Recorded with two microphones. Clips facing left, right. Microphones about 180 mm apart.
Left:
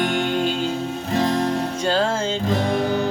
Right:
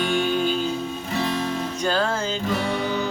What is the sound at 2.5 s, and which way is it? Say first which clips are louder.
Music: left 5 dB; 40° left (ahead or behind).